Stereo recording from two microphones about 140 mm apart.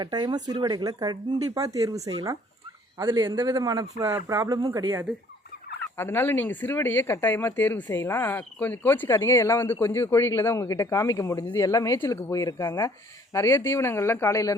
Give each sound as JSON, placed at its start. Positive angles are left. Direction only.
{"t": 0.0, "sound": "speech", "side_deg": -30}
{"t": 3.0, "sound": "a man's voice", "side_deg": -35}
{"t": 6.0, "sound": "speech", "side_deg": 15}